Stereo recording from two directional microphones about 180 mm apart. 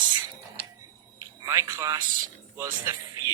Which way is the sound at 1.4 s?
15° right (ahead or behind).